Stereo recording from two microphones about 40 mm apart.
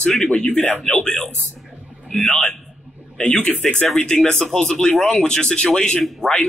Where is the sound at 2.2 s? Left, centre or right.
Centre.